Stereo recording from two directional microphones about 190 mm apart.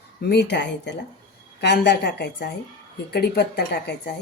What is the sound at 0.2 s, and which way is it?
Speech, 60° left (ahead or behind).